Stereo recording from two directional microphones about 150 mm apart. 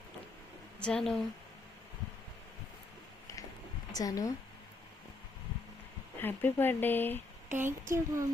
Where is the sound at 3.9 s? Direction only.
25° left (ahead or behind).